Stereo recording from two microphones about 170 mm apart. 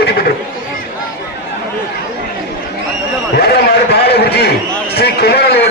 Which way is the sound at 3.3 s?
70° left (ahead or behind).